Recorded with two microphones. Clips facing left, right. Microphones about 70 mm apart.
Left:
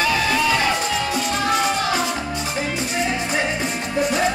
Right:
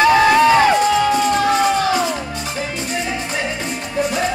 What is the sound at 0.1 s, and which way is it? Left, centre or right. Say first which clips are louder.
Music: right 8 dB; right.